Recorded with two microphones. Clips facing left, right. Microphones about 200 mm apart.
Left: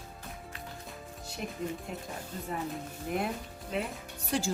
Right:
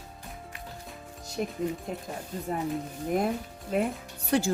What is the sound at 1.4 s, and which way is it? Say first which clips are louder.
Speech: right 7 dB; 40° right (ahead or behind).